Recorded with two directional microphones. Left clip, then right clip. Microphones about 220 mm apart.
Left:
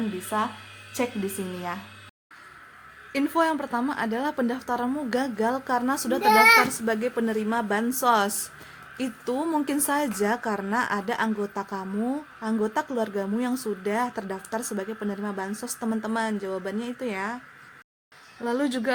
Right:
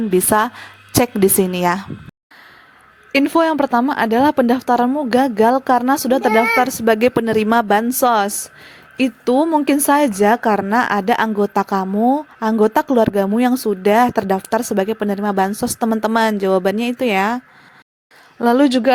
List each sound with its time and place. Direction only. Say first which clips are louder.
3.1 s a woman's voice: right 9 dB; 35° right (ahead or behind)